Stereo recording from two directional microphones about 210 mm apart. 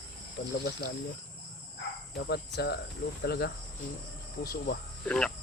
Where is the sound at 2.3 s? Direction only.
50° left (ahead or behind).